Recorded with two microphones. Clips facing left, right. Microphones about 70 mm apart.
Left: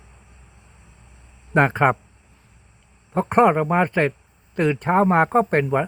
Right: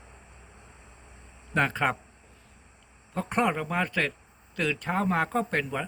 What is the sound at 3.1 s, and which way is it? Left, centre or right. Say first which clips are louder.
Speech: left 10 dB; left.